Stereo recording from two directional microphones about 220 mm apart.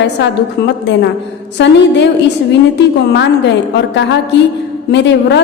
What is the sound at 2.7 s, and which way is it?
Speech, 50° left (ahead or behind).